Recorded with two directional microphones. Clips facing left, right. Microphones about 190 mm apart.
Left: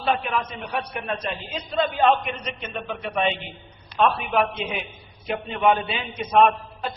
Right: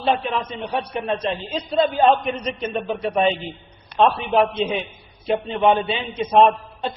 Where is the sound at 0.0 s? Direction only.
30° right (ahead or behind).